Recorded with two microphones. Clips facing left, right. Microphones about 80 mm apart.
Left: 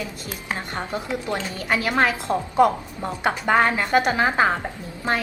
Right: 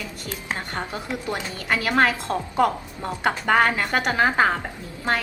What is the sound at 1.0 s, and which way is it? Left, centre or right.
Speech, centre.